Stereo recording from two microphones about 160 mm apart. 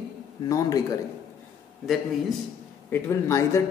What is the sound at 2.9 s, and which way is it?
Speech, 20° left (ahead or behind).